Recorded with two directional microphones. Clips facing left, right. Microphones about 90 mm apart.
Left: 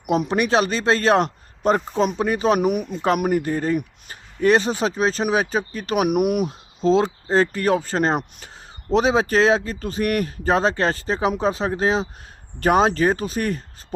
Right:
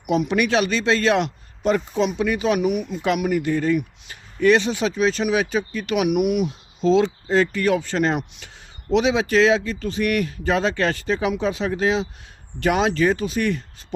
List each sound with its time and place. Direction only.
0.0 s speech: 35° left (ahead or behind)